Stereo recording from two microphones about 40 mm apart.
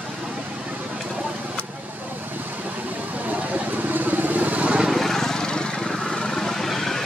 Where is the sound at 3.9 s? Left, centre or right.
Right.